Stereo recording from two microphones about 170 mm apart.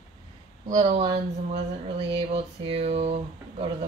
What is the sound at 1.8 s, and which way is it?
Speech, 35° right (ahead or behind).